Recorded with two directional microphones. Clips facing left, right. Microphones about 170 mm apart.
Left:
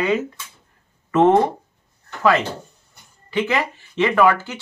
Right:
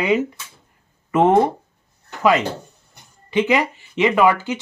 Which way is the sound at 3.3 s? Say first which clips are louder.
Right 3 dB; 15° right (ahead or behind).